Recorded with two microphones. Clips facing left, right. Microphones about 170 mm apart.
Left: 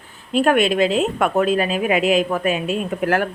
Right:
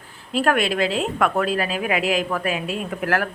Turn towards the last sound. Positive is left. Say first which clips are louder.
# left 4 dB
turn(degrees=25)  # may be behind; listen again after turning